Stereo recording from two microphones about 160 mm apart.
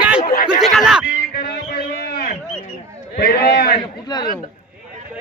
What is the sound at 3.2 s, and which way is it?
Speech, 70° left (ahead or behind).